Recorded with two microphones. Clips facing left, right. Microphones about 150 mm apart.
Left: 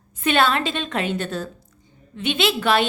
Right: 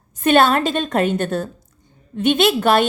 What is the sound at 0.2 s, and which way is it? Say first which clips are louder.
A woman's voice: right 5 dB; 45° right (ahead or behind).